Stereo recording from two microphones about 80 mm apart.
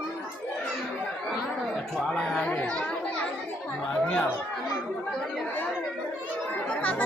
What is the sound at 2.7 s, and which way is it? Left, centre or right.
Chatter, centre.